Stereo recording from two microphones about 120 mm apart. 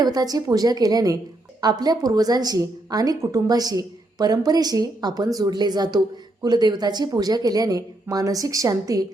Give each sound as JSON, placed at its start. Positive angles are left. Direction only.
{"t": 0.0, "sound": "a woman's voice", "side_deg": -35}